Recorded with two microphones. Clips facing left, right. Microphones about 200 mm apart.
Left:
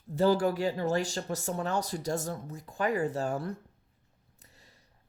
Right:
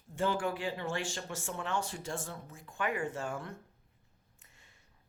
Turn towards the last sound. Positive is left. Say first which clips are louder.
# left 6 dB
turn(degrees=40)  # may be behind; listen again after turning